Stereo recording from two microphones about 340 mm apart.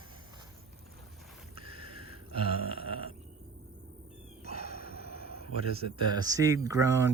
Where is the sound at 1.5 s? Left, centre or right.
Centre.